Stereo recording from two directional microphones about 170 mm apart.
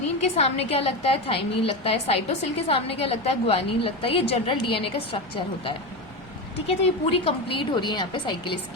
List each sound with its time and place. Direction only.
0.2 s a woman's voice: 40° left (ahead or behind)
6.7 s a woman's voice: 35° left (ahead or behind)